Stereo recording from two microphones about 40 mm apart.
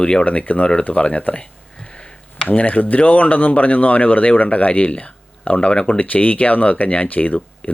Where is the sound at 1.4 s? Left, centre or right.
Left.